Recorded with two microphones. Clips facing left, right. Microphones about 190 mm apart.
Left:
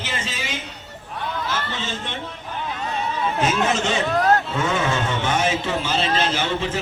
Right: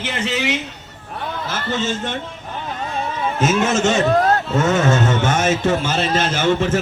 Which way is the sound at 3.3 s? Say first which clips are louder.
Right 5 dB; 45° right (ahead or behind).